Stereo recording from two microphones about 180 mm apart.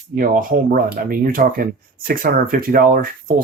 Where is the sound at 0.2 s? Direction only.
50° right (ahead or behind).